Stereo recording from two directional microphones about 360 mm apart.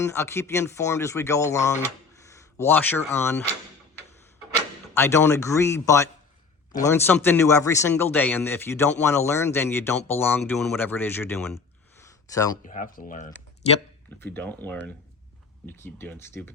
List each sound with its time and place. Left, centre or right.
0.0 s speech: centre
2.2 s a sound: centre
3.1 s speech: centre
4.9 s speech: centre
12.6 s speech: left
14.2 s speech: centre